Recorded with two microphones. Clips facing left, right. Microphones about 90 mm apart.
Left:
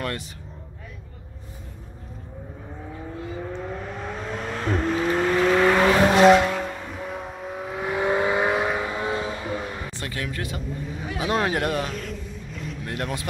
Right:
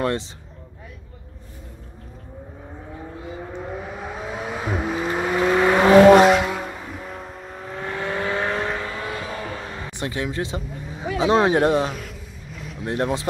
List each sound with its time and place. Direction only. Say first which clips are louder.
0.0 s speech: right 7 dB; 25° right (ahead or behind)
3.2 s vehicle: left 2 dB; 10° right (ahead or behind); by 9.7 s 20° left (ahead or behind)
9.8 s vehicle: right 4 dB; 20° right (ahead or behind)
11.0 s speech: right 7 dB; 25° right (ahead or behind)
11.9 s vehicle: left 2 dB; 5° right (ahead or behind)
12.8 s speech: right 8 dB; 25° right (ahead or behind)